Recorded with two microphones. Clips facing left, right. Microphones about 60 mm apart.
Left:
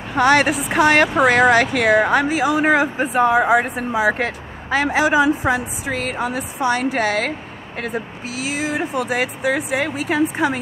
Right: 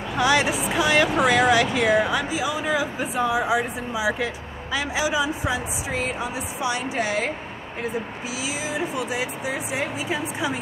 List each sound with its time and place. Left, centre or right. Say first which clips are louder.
0.1 s speech: left 6 dB; left
8.4 s speech: left 6 dB; left